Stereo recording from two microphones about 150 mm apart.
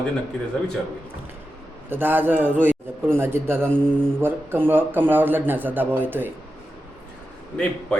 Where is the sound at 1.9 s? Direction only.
15° right (ahead or behind).